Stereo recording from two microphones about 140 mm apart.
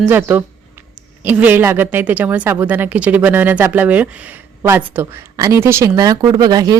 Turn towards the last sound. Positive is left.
turn(degrees=-25)  # may be behind; listen again after turning